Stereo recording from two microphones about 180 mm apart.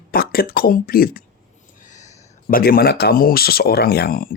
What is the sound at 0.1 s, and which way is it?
Speech, 55° left (ahead or behind).